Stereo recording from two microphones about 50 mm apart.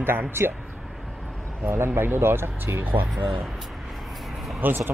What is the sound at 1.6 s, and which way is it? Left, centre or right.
Speech, right.